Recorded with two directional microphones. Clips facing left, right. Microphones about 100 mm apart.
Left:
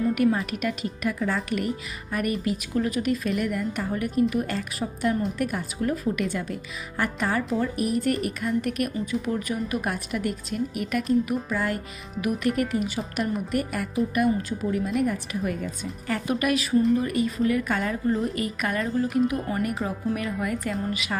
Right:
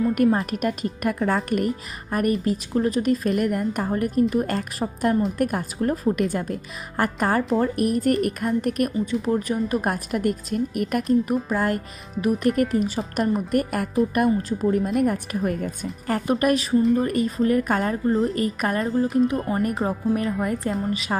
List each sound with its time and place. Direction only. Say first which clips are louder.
0.1 s speech: right 3 dB; 40° right (ahead or behind)